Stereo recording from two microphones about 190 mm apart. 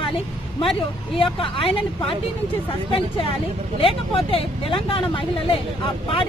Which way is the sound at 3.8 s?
30° left (ahead or behind).